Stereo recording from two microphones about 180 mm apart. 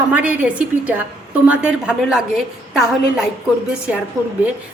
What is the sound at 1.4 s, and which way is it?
A woman's voice, 5° right (ahead or behind).